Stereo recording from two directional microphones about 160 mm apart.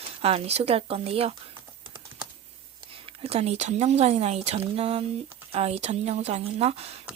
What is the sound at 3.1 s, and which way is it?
Speech, 35° right (ahead or behind).